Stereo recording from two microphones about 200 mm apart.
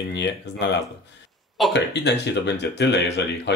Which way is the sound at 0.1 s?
60° left (ahead or behind).